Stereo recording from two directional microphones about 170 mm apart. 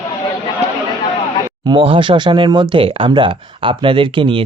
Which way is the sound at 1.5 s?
25° right (ahead or behind).